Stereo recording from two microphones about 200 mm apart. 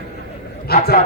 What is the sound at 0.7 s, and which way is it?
Speech, 50° left (ahead or behind).